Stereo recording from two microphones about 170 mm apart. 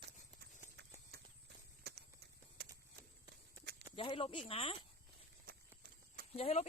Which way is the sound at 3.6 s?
75° right (ahead or behind).